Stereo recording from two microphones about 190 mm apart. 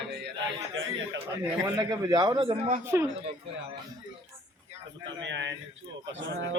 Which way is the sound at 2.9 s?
15° right (ahead or behind).